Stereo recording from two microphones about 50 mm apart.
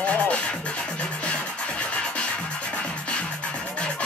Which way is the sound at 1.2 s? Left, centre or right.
Left.